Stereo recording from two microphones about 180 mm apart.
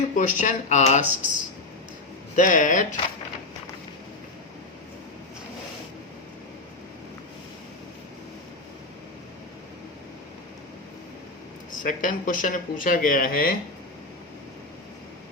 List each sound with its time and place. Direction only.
0.2 s speech: 45° left (ahead or behind)
2.3 s speech: 45° left (ahead or behind)
11.7 s speech: 45° left (ahead or behind)